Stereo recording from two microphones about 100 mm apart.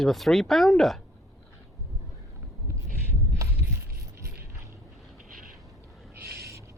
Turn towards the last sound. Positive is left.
turn(degrees=-30)  # may be behind; listen again after turning